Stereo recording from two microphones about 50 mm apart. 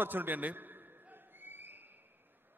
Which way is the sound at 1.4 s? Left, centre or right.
Right.